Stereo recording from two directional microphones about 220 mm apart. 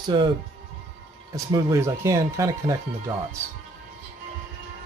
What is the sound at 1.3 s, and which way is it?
Speech, 15° right (ahead or behind).